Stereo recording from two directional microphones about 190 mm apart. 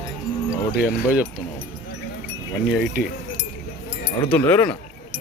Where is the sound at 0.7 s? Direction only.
5° right (ahead or behind).